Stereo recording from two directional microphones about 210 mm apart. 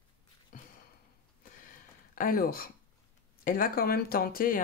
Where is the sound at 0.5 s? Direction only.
40° left (ahead or behind).